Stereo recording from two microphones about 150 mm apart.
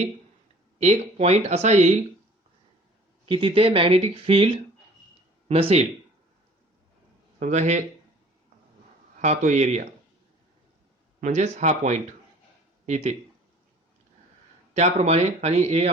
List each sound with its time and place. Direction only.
0.8 s speech: 45° right (ahead or behind)
3.2 s speech: 35° right (ahead or behind)
7.3 s speech: 55° right (ahead or behind)
9.2 s speech: 55° right (ahead or behind)
11.2 s speech: 50° right (ahead or behind)
14.7 s speech: 50° right (ahead or behind)